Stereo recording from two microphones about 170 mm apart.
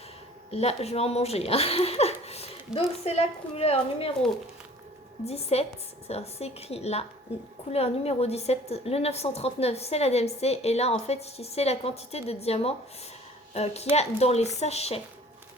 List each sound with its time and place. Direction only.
0.5 s a woman's voice: 40° left (ahead or behind)
5.2 s a woman's voice: 35° left (ahead or behind)